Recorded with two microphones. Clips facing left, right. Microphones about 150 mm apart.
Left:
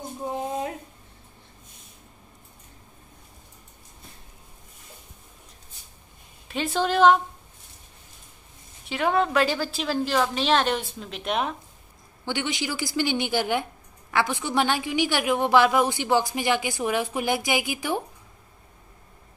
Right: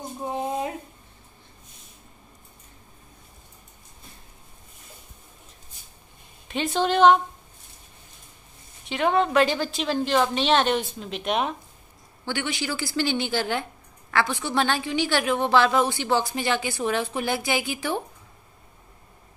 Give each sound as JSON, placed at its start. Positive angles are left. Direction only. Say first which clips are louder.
{"t": 0.2, "sound": "a sound", "louder": "right 1 dB", "side_deg": -5}
{"t": 6.5, "sound": "a woman's voice", "louder": "right 1 dB", "side_deg": 5}
{"t": 8.8, "sound": "a woman's voice", "louder": "right 1 dB", "side_deg": 5}
{"t": 12.3, "sound": "a woman's voice", "louder": "even", "side_deg": 20}